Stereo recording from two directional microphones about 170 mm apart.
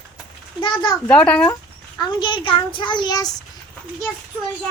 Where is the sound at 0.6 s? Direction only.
25° left (ahead or behind).